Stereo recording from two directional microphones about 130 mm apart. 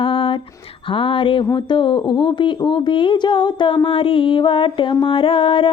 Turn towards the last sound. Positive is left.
turn(degrees=40)  # may be behind; listen again after turning